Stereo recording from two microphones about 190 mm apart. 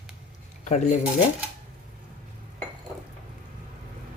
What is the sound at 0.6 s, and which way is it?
Speech, 40° left (ahead or behind).